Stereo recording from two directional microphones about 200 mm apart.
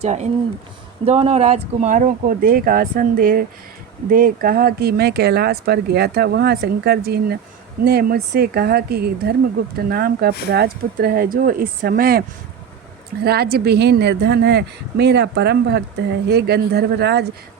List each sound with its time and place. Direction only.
0.0 s speech: 35° right (ahead or behind)
13.2 s a woman's voice: 50° right (ahead or behind)